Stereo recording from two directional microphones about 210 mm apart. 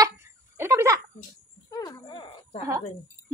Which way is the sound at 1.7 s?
15° left (ahead or behind).